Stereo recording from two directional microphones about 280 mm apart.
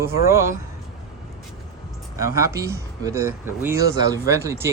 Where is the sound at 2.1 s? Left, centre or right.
Centre.